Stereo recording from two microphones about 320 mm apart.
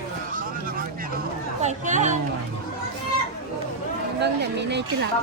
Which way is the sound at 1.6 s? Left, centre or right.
Right.